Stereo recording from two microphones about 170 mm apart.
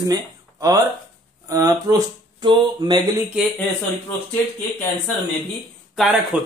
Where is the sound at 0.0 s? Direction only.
20° right (ahead or behind).